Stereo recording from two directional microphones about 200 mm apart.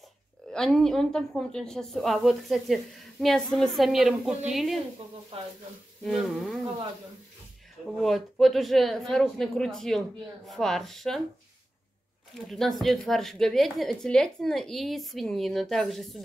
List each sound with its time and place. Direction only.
0.5 s a woman's voice: centre (ahead or behind)
5.3 s speech: 25° right (ahead or behind)
6.0 s a woman's voice: centre (ahead or behind)
8.0 s a woman's voice: centre (ahead or behind)
12.4 s a woman's voice: centre (ahead or behind)